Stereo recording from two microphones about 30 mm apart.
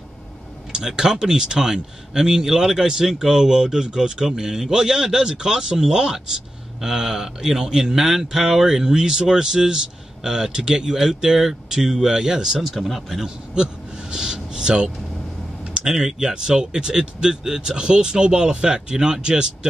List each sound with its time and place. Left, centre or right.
0.7 s speech: right
12.7 s speech: centre
13.6 s a sound: right
15.8 s speech: centre